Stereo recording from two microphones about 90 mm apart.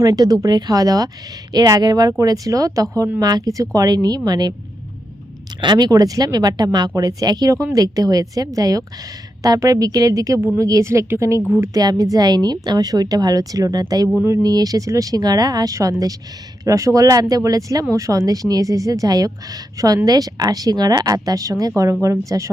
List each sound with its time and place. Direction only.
0.0 s speech: 45° right (ahead or behind)
5.5 s speech: 55° right (ahead or behind)